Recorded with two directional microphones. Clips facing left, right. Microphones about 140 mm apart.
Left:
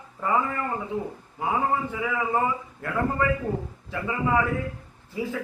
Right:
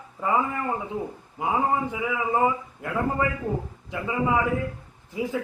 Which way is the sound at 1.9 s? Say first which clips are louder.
Even; 15° right (ahead or behind).